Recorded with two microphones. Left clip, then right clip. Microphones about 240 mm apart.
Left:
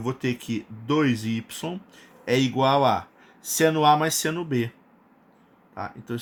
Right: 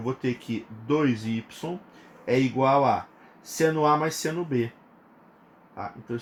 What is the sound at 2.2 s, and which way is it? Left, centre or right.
Speech, left.